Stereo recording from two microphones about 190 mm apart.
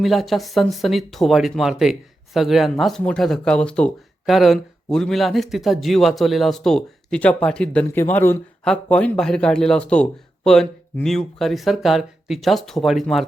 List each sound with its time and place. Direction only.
0.0 s speech: centre (ahead or behind)